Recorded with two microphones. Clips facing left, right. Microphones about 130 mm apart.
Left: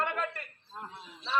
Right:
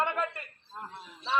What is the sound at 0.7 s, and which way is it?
Speech, 5° left (ahead or behind).